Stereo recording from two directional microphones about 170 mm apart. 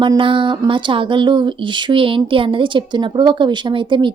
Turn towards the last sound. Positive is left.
turn(degrees=-30)  # may be behind; listen again after turning